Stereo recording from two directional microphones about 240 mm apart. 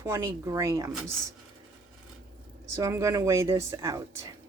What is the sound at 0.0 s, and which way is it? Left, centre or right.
Speech, centre.